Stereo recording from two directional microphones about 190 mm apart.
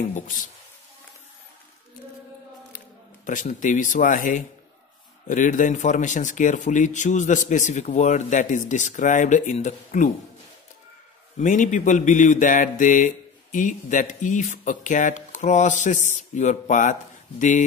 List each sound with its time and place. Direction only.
3.3 s speech: 40° left (ahead or behind)
11.3 s speech: 40° left (ahead or behind)